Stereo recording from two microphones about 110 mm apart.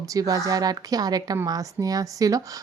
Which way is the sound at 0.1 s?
30° right (ahead or behind).